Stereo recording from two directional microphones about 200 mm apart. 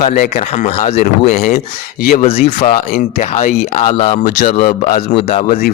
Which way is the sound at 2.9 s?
50° left (ahead or behind).